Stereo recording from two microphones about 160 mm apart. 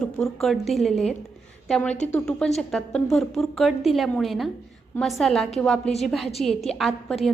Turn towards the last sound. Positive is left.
turn(degrees=0)  # may be behind; listen again after turning